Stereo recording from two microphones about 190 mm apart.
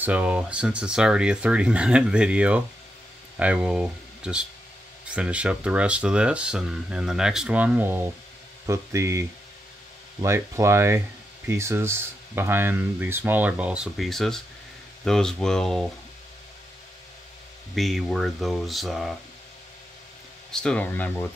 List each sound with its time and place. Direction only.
0.0 s speech: 5° right (ahead or behind)
10.2 s speech: 15° right (ahead or behind); by 15.9 s centre (ahead or behind)
17.7 s speech: centre (ahead or behind)
20.5 s speech: 5° left (ahead or behind)